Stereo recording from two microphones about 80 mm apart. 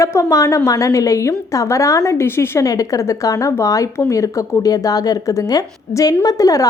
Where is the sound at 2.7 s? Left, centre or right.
Left.